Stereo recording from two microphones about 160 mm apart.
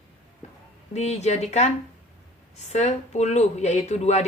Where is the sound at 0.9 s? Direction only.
45° left (ahead or behind).